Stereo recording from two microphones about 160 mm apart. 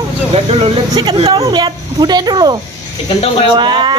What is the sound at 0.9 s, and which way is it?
A woman's voice, 30° right (ahead or behind).